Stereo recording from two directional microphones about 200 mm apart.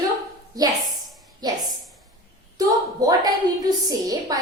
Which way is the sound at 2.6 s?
20° right (ahead or behind).